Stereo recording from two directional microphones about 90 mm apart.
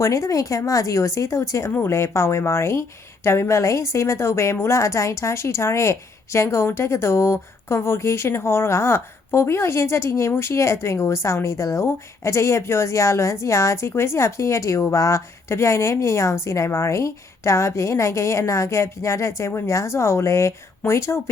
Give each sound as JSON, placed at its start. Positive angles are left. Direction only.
{"t": 0.0, "sound": "a woman's voice", "side_deg": 35}